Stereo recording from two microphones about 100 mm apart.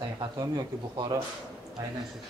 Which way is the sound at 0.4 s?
45° right (ahead or behind).